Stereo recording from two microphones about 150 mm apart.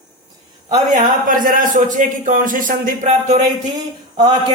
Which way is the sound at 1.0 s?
65° right (ahead or behind).